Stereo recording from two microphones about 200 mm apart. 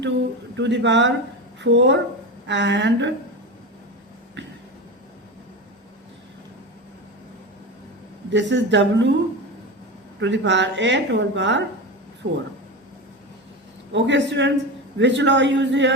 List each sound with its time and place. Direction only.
0.5 s a woman's voice: 65° right (ahead or behind)
8.3 s a woman's voice: 65° right (ahead or behind)
10.2 s a woman's voice: 65° right (ahead or behind)
12.2 s speech: 45° right (ahead or behind)
13.9 s a woman's voice: 60° right (ahead or behind)